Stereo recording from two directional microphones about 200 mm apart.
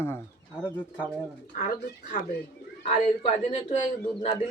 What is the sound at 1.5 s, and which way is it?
Speech, 45° left (ahead or behind).